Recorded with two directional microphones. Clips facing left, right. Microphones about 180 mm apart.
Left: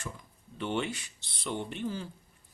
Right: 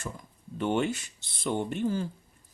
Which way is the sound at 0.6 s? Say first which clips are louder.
Right 5 dB; 45° right (ahead or behind).